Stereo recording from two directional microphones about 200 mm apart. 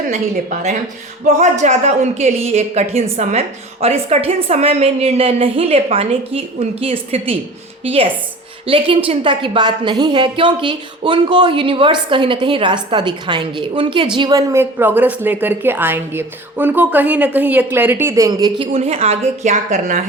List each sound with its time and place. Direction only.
0.1 s a woman's voice: 35° right (ahead or behind)